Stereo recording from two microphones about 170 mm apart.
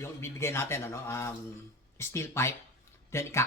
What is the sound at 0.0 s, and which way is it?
Speech, 15° left (ahead or behind).